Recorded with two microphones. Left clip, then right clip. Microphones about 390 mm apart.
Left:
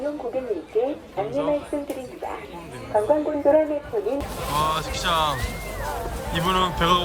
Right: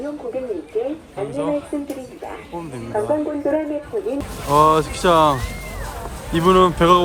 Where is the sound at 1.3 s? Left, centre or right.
Centre.